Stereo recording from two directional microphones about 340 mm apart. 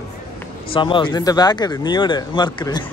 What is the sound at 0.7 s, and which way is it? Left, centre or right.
Speech, centre.